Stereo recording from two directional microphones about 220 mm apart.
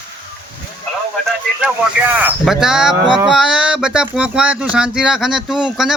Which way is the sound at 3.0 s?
20° right (ahead or behind).